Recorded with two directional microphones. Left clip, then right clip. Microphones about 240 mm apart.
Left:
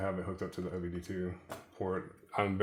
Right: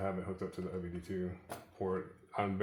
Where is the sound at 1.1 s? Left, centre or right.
Left.